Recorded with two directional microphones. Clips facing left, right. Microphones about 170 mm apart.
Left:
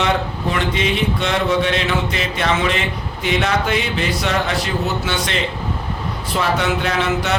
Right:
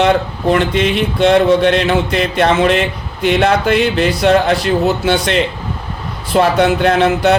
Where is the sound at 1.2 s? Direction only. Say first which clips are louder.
Right 12 dB; 60° right (ahead or behind).